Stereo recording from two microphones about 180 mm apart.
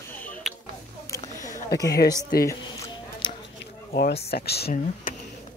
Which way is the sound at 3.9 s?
60° left (ahead or behind).